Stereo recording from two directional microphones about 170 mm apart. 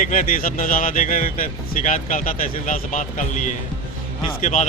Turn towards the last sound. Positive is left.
turn(degrees=45)  # may be behind; listen again after turning